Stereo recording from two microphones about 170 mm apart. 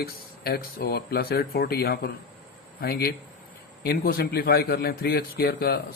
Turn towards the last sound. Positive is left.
turn(degrees=65)  # may be behind; listen again after turning